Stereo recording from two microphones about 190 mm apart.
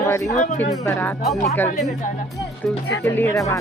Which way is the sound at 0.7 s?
10° left (ahead or behind).